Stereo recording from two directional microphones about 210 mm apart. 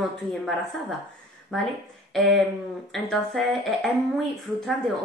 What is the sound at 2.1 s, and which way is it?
Speech, centre (ahead or behind).